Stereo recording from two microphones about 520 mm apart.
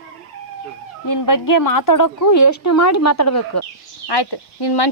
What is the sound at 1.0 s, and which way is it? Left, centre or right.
Speech, left.